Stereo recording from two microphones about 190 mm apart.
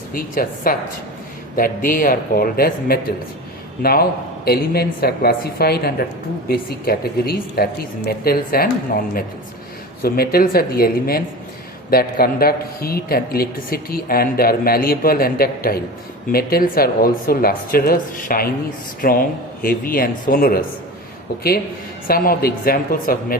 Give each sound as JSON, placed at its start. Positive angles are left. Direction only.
{"t": 0.1, "sound": "speech", "side_deg": 50}
{"t": 4.4, "sound": "speech", "side_deg": 55}
{"t": 22.0, "sound": "speech", "side_deg": 50}